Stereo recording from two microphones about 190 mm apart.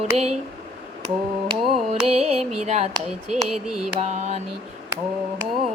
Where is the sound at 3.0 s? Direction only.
Centre (ahead or behind).